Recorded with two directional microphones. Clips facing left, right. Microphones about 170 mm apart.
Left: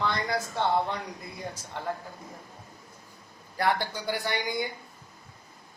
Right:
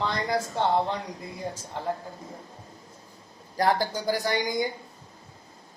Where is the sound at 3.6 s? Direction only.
40° right (ahead or behind).